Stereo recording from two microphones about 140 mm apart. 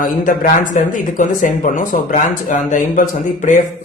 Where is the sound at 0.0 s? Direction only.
75° left (ahead or behind).